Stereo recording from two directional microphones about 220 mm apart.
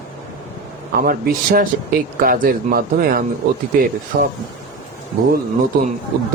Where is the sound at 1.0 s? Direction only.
40° right (ahead or behind).